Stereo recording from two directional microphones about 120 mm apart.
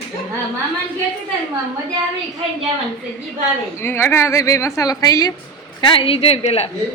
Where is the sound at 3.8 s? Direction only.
20° left (ahead or behind).